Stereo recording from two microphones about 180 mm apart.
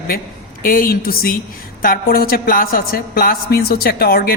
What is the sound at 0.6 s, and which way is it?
A woman's voice, 55° left (ahead or behind).